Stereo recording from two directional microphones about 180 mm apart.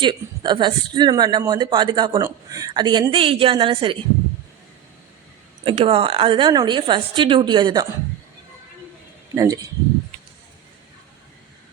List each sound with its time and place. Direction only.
0.0 s speech: 25° right (ahead or behind)
5.6 s speech: 30° right (ahead or behind)
9.3 s speech: 20° right (ahead or behind)